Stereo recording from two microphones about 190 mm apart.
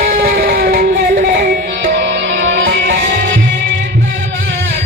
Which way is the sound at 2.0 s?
65° right (ahead or behind).